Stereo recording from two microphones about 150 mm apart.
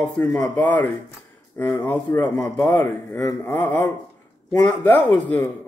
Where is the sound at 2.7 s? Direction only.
15° left (ahead or behind).